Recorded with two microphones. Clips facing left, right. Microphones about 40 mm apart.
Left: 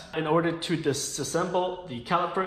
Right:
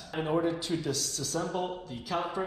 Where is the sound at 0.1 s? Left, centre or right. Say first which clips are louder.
Left 4 dB; left.